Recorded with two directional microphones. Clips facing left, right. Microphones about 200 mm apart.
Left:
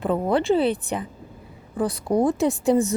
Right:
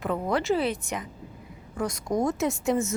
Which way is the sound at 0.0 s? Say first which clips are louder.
Left 5 dB; 30° left (ahead or behind).